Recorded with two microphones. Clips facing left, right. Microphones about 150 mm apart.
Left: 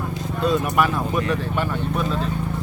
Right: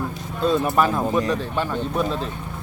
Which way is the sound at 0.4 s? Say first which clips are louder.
Right 1 dB; 30° right (ahead or behind).